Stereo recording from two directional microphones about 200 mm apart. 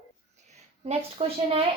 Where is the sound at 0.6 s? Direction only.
30° right (ahead or behind).